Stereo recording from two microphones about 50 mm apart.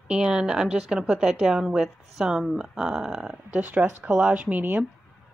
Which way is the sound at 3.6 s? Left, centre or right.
Right.